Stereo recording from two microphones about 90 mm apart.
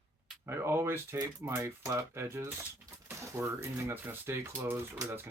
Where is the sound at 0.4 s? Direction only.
30° right (ahead or behind).